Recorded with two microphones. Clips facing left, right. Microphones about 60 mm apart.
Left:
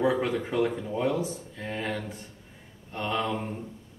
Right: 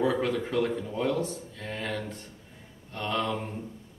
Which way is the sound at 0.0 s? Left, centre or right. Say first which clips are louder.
Left 1 dB; centre.